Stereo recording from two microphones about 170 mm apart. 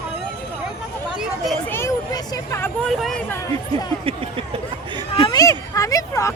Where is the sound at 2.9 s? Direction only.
Centre (ahead or behind).